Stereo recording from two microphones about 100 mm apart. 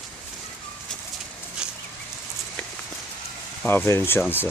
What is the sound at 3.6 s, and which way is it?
Speech, 20° left (ahead or behind).